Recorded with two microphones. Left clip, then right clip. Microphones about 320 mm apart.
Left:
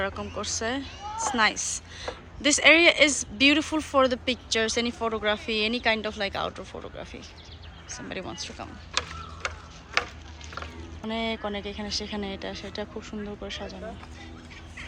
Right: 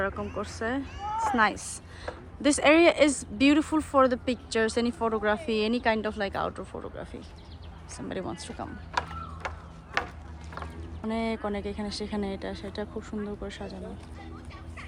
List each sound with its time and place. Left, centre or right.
0.0 s speech: centre
8.9 s mechanisms: right
9.4 s tick-tock: right
10.0 s a sound: right
11.0 s speech: centre